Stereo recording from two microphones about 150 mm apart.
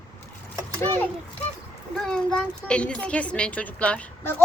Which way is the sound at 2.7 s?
5° left (ahead or behind).